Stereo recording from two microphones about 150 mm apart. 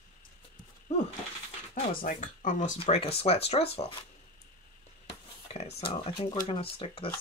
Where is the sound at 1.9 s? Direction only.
65° left (ahead or behind).